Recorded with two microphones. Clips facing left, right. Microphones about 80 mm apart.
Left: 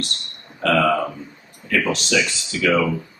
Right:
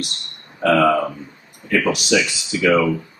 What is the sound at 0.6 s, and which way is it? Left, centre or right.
A man's voice, centre.